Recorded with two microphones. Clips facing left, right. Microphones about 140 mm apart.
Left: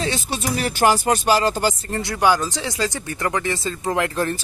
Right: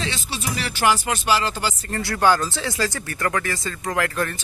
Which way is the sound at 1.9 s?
20° left (ahead or behind).